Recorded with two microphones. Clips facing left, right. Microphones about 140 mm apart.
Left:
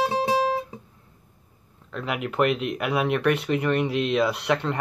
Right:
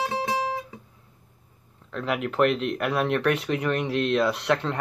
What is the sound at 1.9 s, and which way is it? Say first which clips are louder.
Speech: right 2 dB; centre (ahead or behind).